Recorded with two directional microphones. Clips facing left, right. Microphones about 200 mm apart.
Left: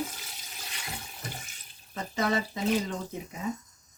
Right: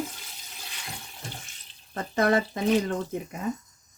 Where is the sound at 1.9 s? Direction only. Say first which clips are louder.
Right 5 dB; 55° right (ahead or behind).